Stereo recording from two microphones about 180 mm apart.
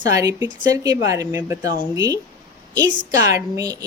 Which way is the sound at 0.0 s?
20° right (ahead or behind).